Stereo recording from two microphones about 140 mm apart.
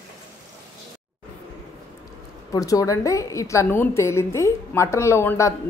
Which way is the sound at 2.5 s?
25° left (ahead or behind).